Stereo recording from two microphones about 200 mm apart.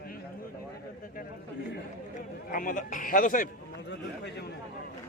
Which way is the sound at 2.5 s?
40° left (ahead or behind).